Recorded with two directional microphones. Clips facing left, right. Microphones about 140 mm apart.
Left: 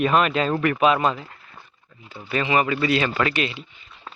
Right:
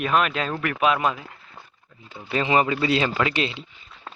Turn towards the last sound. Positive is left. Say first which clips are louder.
# even
turn(degrees=-25)  # may be behind; listen again after turning